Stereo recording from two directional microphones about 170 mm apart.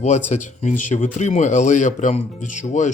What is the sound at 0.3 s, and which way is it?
Speech, 45° left (ahead or behind).